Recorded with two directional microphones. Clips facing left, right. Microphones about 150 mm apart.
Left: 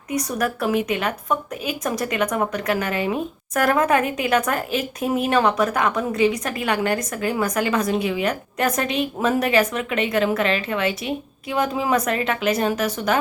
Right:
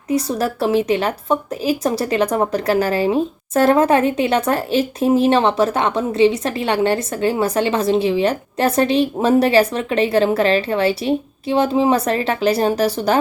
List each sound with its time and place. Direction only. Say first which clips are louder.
0.1 s a woman's voice: right 4 dB; 30° right (ahead or behind)